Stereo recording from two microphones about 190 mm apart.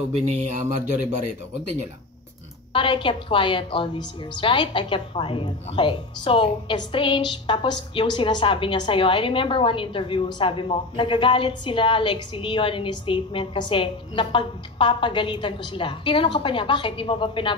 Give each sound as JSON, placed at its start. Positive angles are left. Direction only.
{"t": 0.2, "sound": "speech", "side_deg": -40}
{"t": 2.7, "sound": "a woman's voice", "side_deg": 25}